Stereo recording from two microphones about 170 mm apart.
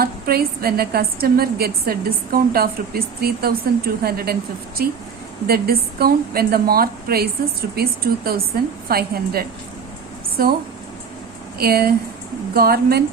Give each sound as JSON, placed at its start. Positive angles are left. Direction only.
{"t": 0.0, "sound": "a woman's voice", "side_deg": -65}